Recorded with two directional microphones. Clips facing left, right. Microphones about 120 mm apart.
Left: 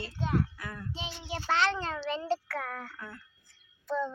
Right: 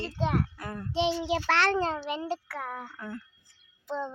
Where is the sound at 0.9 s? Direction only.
75° right (ahead or behind).